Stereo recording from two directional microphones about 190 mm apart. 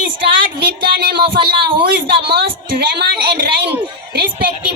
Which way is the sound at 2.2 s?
60° right (ahead or behind).